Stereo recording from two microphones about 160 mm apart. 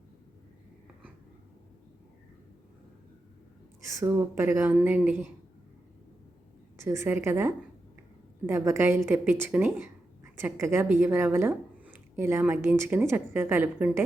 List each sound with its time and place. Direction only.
3.8 s speech: 20° right (ahead or behind)
6.7 s speech: 15° right (ahead or behind)